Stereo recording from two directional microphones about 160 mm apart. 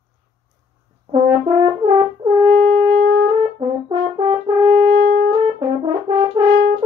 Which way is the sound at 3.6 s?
25° right (ahead or behind).